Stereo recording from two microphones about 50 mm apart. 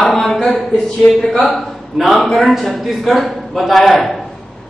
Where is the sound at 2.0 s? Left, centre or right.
Centre.